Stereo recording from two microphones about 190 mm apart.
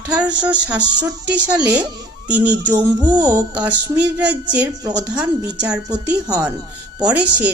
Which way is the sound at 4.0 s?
5° right (ahead or behind).